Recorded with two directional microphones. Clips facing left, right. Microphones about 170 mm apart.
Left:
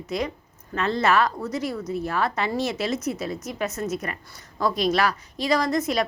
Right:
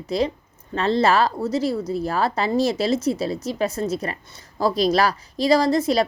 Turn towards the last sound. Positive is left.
turn(degrees=-30)  # may be behind; listen again after turning